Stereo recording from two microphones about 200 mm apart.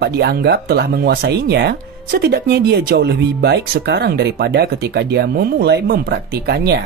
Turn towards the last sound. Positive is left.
turn(degrees=-55)  # may be behind; listen again after turning